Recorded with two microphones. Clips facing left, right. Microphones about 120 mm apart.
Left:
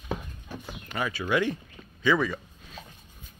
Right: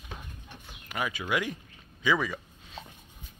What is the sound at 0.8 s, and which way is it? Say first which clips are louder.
Speech: left 2 dB; 10° right (ahead or behind).